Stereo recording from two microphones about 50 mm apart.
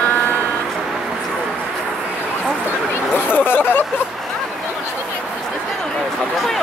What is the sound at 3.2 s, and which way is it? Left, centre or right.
Speech, left.